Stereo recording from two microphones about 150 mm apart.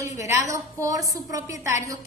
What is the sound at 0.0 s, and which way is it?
A woman's voice, 20° right (ahead or behind).